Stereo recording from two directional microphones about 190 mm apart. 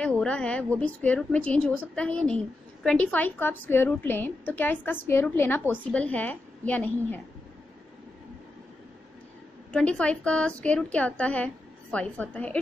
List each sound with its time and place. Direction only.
0.0 s a woman's voice: 5° left (ahead or behind)
9.7 s a woman's voice: 5° left (ahead or behind)